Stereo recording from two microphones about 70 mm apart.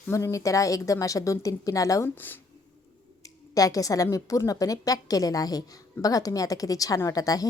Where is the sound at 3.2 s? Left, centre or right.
Left.